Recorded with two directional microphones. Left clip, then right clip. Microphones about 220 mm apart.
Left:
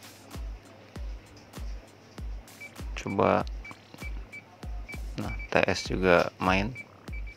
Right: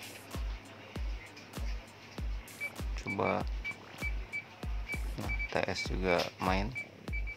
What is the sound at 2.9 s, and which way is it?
Speech, 25° left (ahead or behind).